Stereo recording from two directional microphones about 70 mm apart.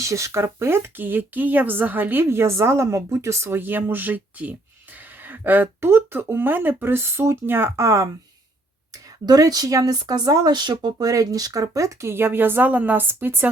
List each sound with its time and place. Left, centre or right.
0.0 s speech: right
3.6 s speech: right
7.8 s speech: right
9.2 s speech: right
10.9 s speech: right